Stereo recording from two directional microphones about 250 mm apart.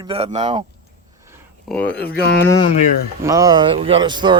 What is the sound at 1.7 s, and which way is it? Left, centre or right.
Speech, centre.